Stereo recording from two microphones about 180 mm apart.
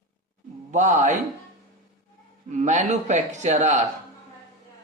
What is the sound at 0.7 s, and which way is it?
Speech, 40° right (ahead or behind).